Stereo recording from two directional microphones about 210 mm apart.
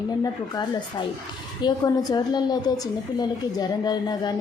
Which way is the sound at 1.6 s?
15° left (ahead or behind).